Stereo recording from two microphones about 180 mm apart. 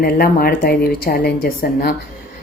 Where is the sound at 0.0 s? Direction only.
55° left (ahead or behind).